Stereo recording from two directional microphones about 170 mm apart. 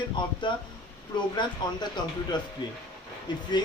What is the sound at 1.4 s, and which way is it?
Speech, 25° left (ahead or behind).